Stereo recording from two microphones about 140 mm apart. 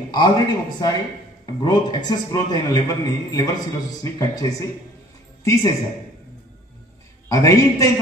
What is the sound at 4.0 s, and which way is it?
A man's voice, 25° left (ahead or behind).